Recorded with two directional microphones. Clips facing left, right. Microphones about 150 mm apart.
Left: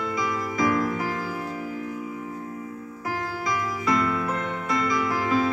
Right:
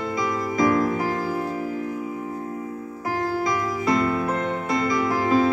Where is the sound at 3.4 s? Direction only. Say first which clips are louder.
Right 3 dB; 30° right (ahead or behind); by 5.5 s 45° right (ahead or behind).